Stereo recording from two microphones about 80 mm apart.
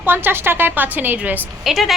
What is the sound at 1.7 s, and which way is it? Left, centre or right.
Speech, centre.